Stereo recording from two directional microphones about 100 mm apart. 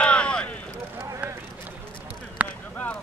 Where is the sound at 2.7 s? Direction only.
15° left (ahead or behind).